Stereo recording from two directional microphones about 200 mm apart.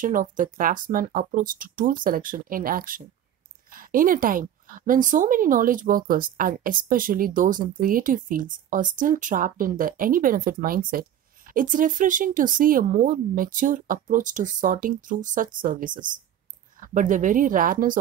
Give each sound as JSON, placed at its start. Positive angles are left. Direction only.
{"t": 0.0, "sound": "a woman's voice", "side_deg": -40}